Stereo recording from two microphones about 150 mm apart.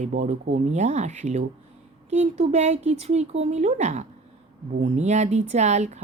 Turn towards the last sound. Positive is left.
turn(degrees=-50)  # may be behind; listen again after turning